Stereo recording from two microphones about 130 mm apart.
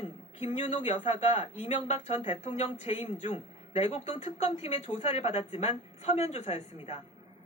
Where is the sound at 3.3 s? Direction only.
45° left (ahead or behind).